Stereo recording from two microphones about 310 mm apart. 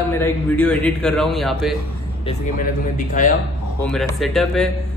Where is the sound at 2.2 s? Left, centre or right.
Left.